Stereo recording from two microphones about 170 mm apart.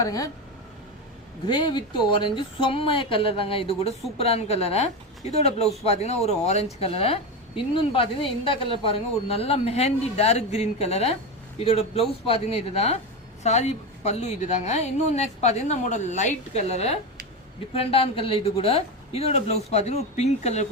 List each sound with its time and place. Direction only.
0.0 s speech: 20° left (ahead or behind)
1.5 s a woman's voice: 25° left (ahead or behind)